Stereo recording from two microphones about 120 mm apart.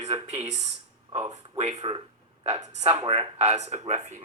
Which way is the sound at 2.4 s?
65° right (ahead or behind).